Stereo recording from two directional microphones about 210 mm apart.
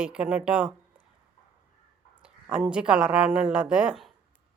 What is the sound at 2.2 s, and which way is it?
Speech, 5° right (ahead or behind).